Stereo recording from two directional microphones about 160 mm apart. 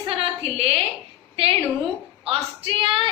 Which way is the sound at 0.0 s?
35° right (ahead or behind).